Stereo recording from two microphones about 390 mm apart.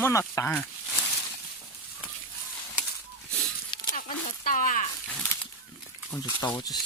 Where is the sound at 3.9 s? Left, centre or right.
Left.